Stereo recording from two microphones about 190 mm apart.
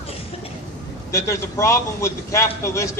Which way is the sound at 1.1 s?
15° left (ahead or behind).